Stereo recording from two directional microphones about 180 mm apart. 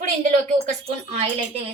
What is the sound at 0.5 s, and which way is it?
Speech, 35° right (ahead or behind).